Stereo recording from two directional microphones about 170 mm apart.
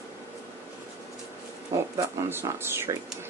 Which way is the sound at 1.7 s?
20° right (ahead or behind).